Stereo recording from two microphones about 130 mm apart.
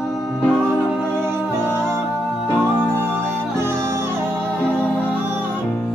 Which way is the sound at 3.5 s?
20° right (ahead or behind).